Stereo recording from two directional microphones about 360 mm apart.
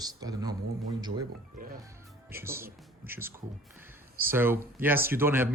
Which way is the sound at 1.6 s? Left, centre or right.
Right.